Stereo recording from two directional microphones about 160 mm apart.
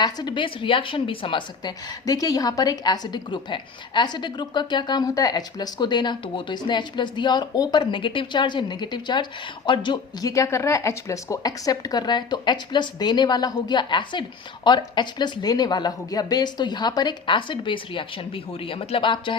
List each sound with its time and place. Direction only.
0.0 s speech: 25° left (ahead or behind)